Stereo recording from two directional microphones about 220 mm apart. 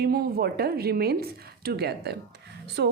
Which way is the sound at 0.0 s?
45° right (ahead or behind).